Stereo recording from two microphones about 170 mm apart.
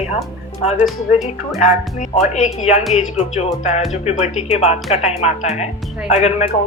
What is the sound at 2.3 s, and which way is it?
Speech, 45° left (ahead or behind).